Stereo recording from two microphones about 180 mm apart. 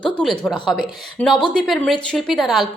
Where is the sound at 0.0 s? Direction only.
5° left (ahead or behind).